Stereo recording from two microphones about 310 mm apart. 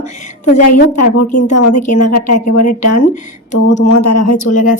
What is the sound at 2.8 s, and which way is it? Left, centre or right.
Speech, left.